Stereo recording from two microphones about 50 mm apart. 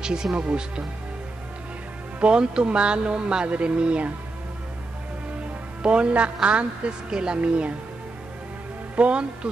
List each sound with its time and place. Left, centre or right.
0.0 s speech: centre
2.1 s speech: right
5.8 s speech: right
8.9 s speech: right